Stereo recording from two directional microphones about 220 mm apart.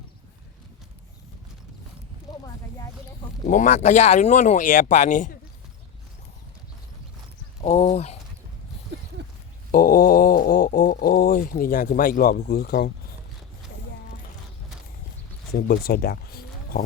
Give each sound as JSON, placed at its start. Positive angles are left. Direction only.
{"t": 3.4, "sound": "speech", "side_deg": 35}
{"t": 7.6, "sound": "speech", "side_deg": 35}
{"t": 9.7, "sound": "speech", "side_deg": 40}
{"t": 15.5, "sound": "speech", "side_deg": 45}